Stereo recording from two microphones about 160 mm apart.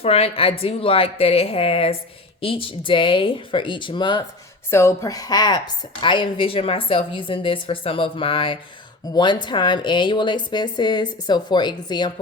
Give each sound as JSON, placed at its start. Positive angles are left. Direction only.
{"t": 0.0, "sound": "a woman's voice", "side_deg": 40}
{"t": 4.7, "sound": "a woman's voice", "side_deg": 15}